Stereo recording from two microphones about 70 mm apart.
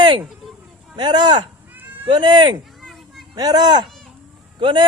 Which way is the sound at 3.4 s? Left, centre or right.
Right.